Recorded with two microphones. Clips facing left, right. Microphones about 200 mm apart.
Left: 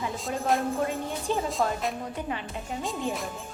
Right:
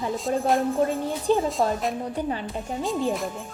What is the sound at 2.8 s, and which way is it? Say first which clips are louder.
Speech: right 8 dB; centre (ahead or behind).